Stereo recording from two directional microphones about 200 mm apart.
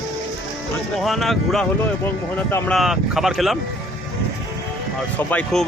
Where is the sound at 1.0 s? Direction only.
Centre (ahead or behind).